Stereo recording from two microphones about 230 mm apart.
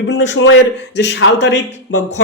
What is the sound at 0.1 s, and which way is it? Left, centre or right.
Speech, left.